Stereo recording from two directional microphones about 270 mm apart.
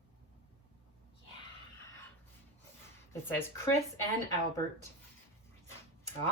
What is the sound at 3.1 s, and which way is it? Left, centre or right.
Speech, centre.